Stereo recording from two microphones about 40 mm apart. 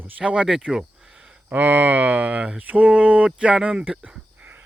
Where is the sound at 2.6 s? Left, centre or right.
Right.